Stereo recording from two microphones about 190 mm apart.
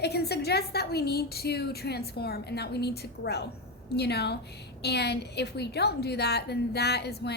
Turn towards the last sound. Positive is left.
turn(degrees=60)  # may be behind; listen again after turning